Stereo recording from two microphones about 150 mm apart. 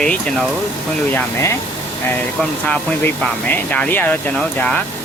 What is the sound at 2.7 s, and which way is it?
Speech, 10° left (ahead or behind).